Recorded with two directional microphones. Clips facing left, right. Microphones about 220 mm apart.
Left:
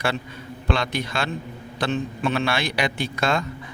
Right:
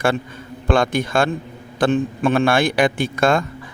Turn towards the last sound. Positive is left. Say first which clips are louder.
# right 6 dB
turn(degrees=-50)  # may be behind; listen again after turning